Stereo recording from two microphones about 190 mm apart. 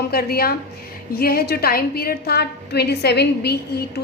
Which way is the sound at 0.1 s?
55° left (ahead or behind).